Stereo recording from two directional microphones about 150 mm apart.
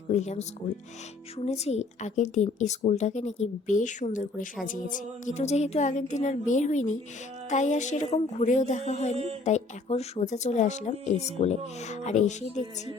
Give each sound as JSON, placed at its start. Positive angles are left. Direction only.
{"t": 0.1, "sound": "speech", "side_deg": 45}
{"t": 1.5, "sound": "speech", "side_deg": 45}
{"t": 9.1, "sound": "speech", "side_deg": -45}
{"t": 9.4, "sound": "speech", "side_deg": 50}